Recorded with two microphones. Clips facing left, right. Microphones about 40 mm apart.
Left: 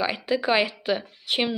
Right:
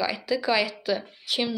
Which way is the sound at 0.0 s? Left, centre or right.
Left.